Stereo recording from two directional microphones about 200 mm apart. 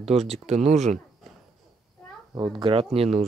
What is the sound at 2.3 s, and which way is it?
Speech, 25° right (ahead or behind).